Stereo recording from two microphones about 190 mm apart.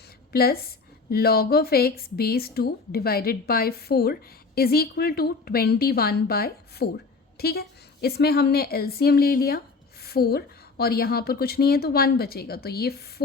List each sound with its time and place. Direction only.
0.3 s a woman's voice: 55° left (ahead or behind)